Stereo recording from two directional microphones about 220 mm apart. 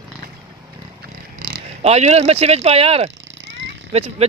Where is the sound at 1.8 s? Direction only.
30° right (ahead or behind).